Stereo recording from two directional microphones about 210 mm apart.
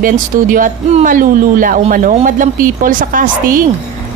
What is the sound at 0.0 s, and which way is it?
A woman's voice, 40° right (ahead or behind).